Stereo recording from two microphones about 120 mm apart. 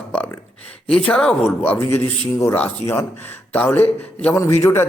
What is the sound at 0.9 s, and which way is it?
A man's voice, 5° left (ahead or behind).